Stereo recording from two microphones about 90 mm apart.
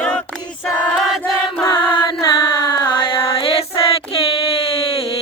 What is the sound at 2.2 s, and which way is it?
Carnatic music, 45° left (ahead or behind).